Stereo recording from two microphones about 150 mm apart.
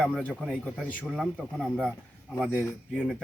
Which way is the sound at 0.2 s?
10° right (ahead or behind).